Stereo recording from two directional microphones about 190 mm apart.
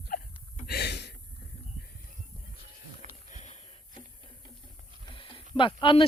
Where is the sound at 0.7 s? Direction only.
60° left (ahead or behind).